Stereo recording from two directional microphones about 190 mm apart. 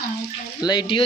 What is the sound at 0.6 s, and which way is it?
Speech, 20° left (ahead or behind).